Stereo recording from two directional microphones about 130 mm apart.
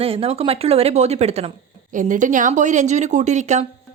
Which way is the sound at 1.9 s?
80° right.